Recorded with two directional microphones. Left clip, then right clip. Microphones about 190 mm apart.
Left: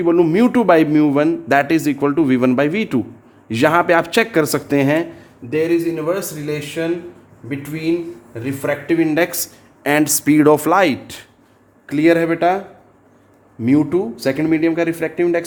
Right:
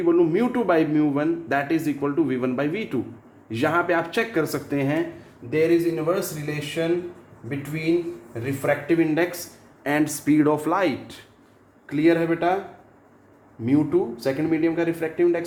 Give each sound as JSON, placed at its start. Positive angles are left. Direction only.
{"t": 0.0, "sound": "a man's voice", "side_deg": 60}
{"t": 5.5, "sound": "a man's voice", "side_deg": 45}
{"t": 9.8, "sound": "speech", "side_deg": 45}
{"t": 11.9, "sound": "a man's voice", "side_deg": 55}
{"t": 13.7, "sound": "speech", "side_deg": 55}